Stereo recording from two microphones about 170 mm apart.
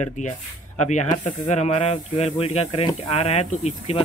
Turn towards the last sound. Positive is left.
turn(degrees=40)  # may be behind; listen again after turning